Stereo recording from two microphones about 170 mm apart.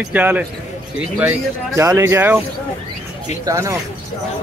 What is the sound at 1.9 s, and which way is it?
Speech, 15° right (ahead or behind).